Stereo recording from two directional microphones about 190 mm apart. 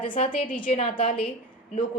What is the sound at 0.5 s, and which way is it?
Speech, 45° left (ahead or behind).